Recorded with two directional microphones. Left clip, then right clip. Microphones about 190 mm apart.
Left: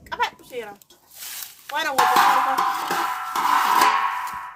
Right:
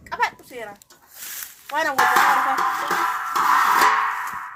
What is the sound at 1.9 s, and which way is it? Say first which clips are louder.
Music: left 1 dB; 20° left (ahead or behind).